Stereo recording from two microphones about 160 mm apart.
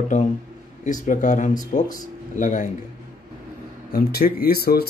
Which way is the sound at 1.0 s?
55° left (ahead or behind).